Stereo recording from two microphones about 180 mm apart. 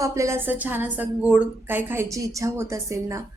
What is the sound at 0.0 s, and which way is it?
A woman's voice, 15° right (ahead or behind).